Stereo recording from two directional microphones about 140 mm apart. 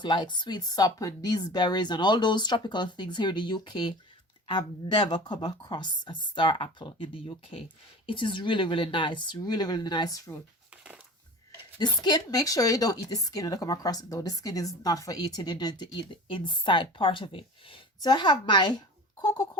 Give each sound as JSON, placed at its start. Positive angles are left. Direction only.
{"t": 0.0, "sound": "speech", "side_deg": 35}
{"t": 11.8, "sound": "speech", "side_deg": 30}